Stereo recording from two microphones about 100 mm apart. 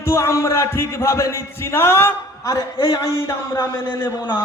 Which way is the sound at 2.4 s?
40° left (ahead or behind).